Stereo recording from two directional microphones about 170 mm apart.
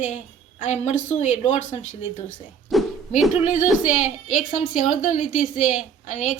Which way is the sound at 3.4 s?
45° left (ahead or behind).